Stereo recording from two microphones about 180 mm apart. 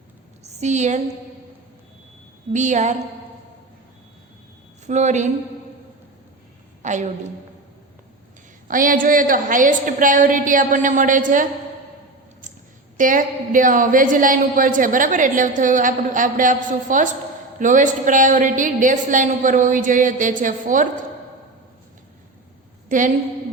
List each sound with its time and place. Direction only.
0.4 s a woman's voice: 40° right (ahead or behind)
2.5 s a woman's voice: 40° right (ahead or behind)
4.9 s a woman's voice: 40° right (ahead or behind)
6.8 s a woman's voice: 40° right (ahead or behind)
8.6 s a woman's voice: 50° right (ahead or behind)
13.0 s a woman's voice: 45° right (ahead or behind)
22.9 s a woman's voice: 45° right (ahead or behind)